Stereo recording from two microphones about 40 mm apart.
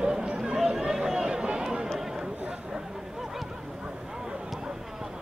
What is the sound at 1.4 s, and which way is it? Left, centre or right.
Run, centre.